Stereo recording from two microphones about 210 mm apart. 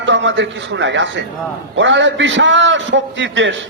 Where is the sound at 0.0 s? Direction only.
60° right (ahead or behind).